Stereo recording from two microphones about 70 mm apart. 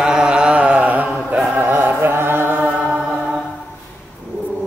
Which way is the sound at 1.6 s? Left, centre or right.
Right.